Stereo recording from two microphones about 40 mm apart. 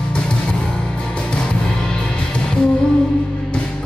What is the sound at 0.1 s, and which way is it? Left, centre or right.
Music, left.